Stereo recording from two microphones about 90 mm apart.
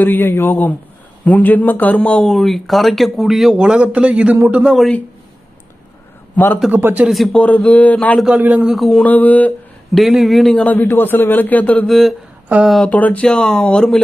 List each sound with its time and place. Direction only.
0.0 s a man's voice: 20° left (ahead or behind)
2.2 s speech: centre (ahead or behind)
6.3 s a man's voice: 20° left (ahead or behind)
6.7 s speech: 20° right (ahead or behind)
7.3 s speech: 15° left (ahead or behind)
8.4 s speech: 15° right (ahead or behind)
8.6 s speech: centre (ahead or behind)
9.0 s speech: 20° left (ahead or behind)
9.9 s speech: centre (ahead or behind)
10.6 s a man's voice: 20° left (ahead or behind)
11.9 s speech: centre (ahead or behind)
12.5 s speech: 20° right (ahead or behind)
12.8 s speech: 15° left (ahead or behind)